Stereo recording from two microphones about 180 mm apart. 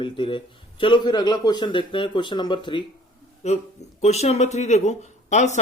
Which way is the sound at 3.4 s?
40° left (ahead or behind).